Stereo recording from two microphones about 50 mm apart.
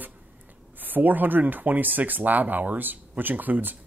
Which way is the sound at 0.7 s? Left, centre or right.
Right.